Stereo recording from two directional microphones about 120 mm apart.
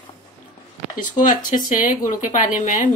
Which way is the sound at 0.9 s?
90° left.